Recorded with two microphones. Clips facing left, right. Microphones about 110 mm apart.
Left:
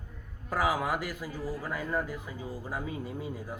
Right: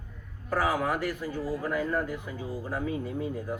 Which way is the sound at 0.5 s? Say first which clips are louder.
Right 2 dB; 10° left (ahead or behind).